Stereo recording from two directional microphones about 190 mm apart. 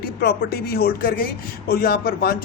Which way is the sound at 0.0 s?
55° left (ahead or behind).